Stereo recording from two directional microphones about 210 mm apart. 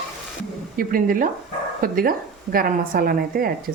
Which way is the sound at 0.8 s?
40° right (ahead or behind).